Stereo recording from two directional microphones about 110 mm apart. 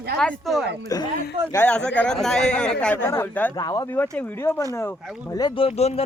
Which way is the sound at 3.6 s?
35° left (ahead or behind).